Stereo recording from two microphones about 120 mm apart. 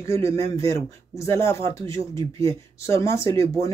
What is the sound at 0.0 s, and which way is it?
Speech, 25° left (ahead or behind).